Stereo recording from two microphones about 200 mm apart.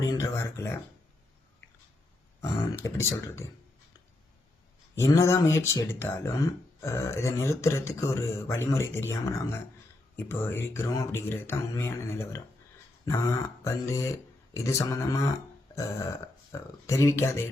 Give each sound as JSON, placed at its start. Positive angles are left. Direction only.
{"t": 0.0, "sound": "speech", "side_deg": 15}
{"t": 2.4, "sound": "speech", "side_deg": 15}
{"t": 4.9, "sound": "speech", "side_deg": 15}